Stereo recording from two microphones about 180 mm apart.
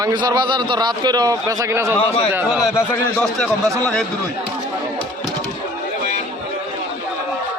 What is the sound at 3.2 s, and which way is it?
Speech, 5° left (ahead or behind).